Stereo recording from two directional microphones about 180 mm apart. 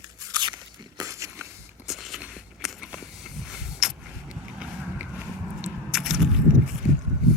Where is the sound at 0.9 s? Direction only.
20° right (ahead or behind).